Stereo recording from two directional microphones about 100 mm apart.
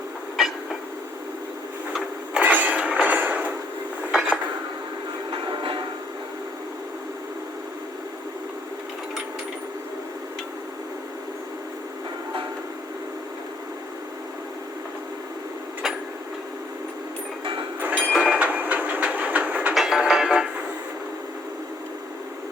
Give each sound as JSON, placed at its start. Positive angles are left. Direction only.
{"t": 0.4, "sound": "a sound", "side_deg": 0}
{"t": 2.4, "sound": "a sound", "side_deg": -15}
{"t": 4.1, "sound": "dishes", "side_deg": -5}
{"t": 5.5, "sound": "music", "side_deg": -60}
{"t": 17.4, "sound": "train", "side_deg": -55}
{"t": 18.1, "sound": "train", "side_deg": -5}
{"t": 18.3, "sound": "train", "side_deg": -15}
{"t": 19.7, "sound": "music", "side_deg": -5}